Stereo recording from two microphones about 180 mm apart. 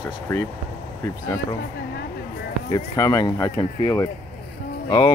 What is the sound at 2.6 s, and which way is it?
Speech, 20° left (ahead or behind).